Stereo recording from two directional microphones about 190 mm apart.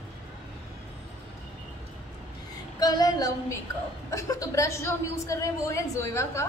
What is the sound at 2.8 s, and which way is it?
Female singing, 20° left (ahead or behind).